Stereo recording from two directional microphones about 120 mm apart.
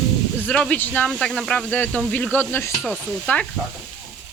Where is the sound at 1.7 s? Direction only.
15° left (ahead or behind).